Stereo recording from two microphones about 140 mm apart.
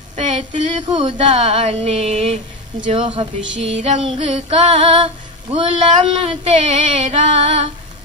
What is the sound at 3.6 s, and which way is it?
Female singing, 50° right (ahead or behind).